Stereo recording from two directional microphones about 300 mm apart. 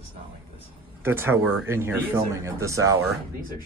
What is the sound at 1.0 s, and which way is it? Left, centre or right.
Speech, centre.